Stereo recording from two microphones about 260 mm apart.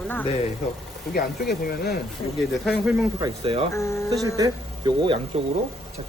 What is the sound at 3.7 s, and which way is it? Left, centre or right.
Speech, centre.